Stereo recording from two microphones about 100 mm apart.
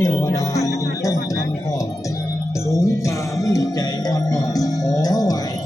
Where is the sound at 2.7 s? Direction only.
30° left (ahead or behind).